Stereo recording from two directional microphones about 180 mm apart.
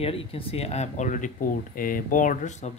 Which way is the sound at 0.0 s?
30° left (ahead or behind).